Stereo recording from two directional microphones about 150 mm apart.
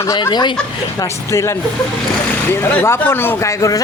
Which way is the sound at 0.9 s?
20° left (ahead or behind).